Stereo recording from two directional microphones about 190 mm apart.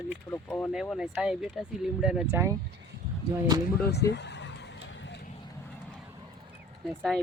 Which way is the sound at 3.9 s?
65° left (ahead or behind).